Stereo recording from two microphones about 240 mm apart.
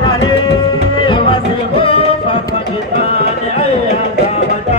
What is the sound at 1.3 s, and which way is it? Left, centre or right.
Music, left.